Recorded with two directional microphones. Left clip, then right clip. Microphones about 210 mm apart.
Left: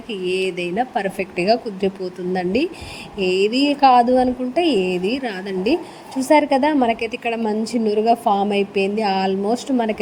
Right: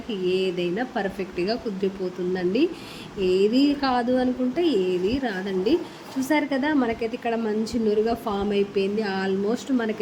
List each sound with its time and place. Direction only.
0.1 s speech: 30° left (ahead or behind)